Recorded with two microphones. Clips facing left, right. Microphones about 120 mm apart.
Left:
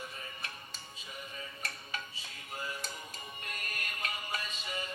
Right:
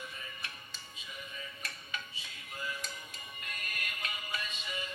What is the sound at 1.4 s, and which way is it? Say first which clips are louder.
Music: left 2 dB; 35° left (ahead or behind).